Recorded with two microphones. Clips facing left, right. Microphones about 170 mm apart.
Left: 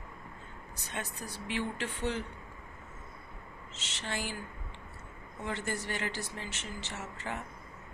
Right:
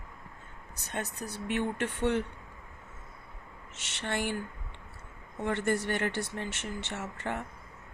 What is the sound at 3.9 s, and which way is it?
Speech, 60° right (ahead or behind).